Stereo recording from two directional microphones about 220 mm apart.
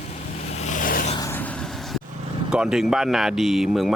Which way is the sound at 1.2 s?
10° left (ahead or behind).